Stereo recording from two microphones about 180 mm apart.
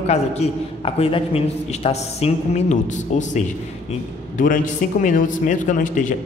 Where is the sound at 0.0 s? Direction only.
35° left (ahead or behind).